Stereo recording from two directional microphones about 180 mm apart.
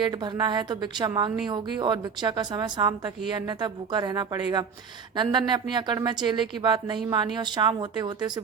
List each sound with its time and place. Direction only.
0.0 s a woman's voice: 25° right (ahead or behind)